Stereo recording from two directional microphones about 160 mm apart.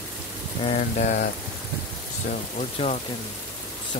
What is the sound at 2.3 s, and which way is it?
Speech, 50° left (ahead or behind).